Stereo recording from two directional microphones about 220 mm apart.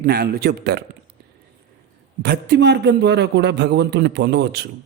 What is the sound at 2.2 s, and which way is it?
Speech, 50° right (ahead or behind).